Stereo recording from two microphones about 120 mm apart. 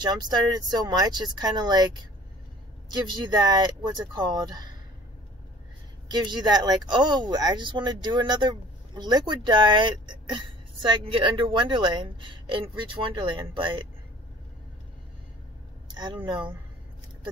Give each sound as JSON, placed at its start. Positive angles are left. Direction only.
{"t": 0.0, "sound": "speech", "side_deg": -35}
{"t": 2.9, "sound": "speech", "side_deg": -35}
{"t": 6.0, "sound": "speech", "side_deg": -35}
{"t": 15.9, "sound": "vehicle", "side_deg": -40}
{"t": 16.3, "sound": "speech", "side_deg": -40}